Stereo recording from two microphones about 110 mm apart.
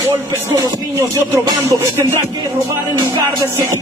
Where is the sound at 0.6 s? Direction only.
25° right (ahead or behind).